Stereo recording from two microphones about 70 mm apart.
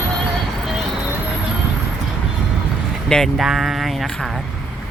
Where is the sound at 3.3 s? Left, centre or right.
Centre.